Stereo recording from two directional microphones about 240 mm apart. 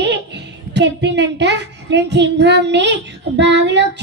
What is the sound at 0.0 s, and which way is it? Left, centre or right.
Speech, right.